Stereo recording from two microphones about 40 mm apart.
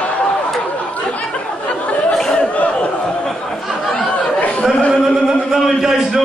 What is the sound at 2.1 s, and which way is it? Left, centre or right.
Chatter, centre.